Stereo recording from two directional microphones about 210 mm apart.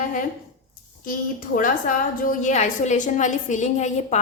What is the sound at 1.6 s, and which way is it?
A woman's voice, 40° left (ahead or behind).